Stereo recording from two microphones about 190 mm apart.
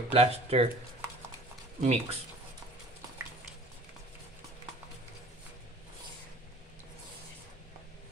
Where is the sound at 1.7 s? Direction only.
35° right (ahead or behind).